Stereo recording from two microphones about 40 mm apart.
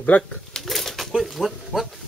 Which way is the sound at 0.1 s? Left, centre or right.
Left.